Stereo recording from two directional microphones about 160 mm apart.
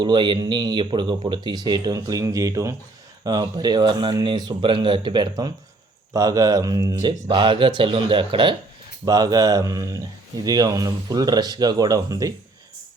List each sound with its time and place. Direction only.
0.0 s speech: 30° right (ahead or behind)